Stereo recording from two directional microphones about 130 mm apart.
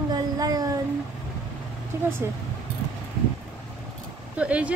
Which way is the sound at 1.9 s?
20° right (ahead or behind).